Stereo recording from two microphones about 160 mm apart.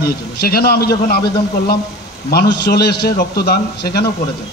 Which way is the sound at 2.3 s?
90° left.